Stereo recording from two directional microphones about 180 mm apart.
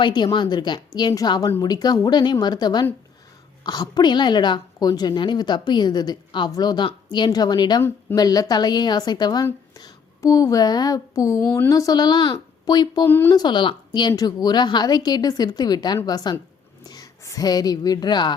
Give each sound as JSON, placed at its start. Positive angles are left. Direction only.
{"t": 0.0, "sound": "a woman's voice", "side_deg": 25}
{"t": 13.4, "sound": "a woman's voice", "side_deg": 25}